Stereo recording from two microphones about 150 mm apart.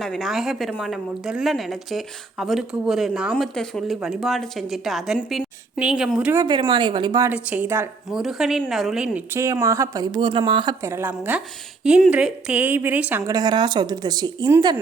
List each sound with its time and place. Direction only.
0.0 s a woman's voice: centre (ahead or behind)
6.3 s a woman's voice: 25° right (ahead or behind)
7.3 s a woman's voice: 10° right (ahead or behind)
8.1 s speech: centre (ahead or behind); by 10.8 s 30° right (ahead or behind)
10.8 s a woman's voice: 15° right (ahead or behind)